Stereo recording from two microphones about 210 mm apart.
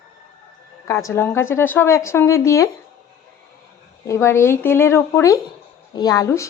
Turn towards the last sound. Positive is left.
turn(degrees=15)  # may be behind; listen again after turning